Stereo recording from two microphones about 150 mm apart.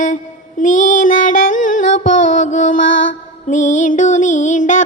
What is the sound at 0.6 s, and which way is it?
Female singing, 60° left (ahead or behind).